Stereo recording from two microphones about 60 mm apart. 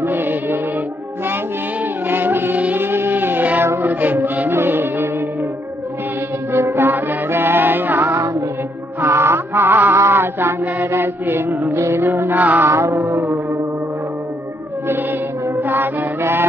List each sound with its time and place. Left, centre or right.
0.0 s music: right
2.0 s music: right
3.6 s music: right
3.9 s music: right
6.5 s music: right
9.9 s a sound: right
10.9 s mantra: right
12.1 s music: right
12.6 s music: right
15.4 s music: right